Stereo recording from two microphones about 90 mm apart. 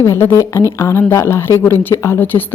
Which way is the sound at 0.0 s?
30° left (ahead or behind).